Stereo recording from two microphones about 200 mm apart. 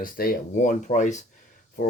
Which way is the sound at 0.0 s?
45° left (ahead or behind).